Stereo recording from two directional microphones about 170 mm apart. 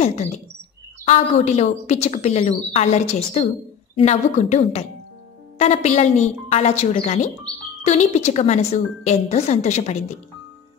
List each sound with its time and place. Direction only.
0.0 s a woman's voice: 40° left (ahead or behind)